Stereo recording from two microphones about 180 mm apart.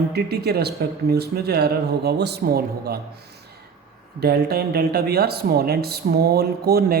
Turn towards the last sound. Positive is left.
turn(degrees=-60)  # may be behind; listen again after turning